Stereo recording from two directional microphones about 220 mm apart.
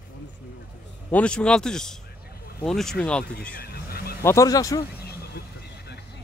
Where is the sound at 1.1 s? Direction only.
5° left (ahead or behind).